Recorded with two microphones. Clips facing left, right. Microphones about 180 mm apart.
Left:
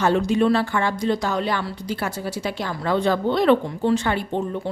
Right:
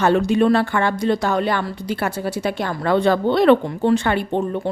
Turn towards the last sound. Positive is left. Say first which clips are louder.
# right 3 dB
turn(degrees=-60)  # may be behind; listen again after turning